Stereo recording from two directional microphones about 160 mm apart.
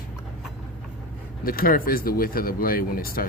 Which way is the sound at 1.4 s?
65° left (ahead or behind).